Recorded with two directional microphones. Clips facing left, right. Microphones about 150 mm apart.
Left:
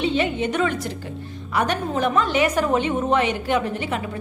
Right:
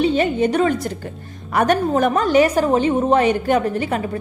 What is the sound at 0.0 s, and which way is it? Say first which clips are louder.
A woman's voice: right 5 dB; 45° right (ahead or behind).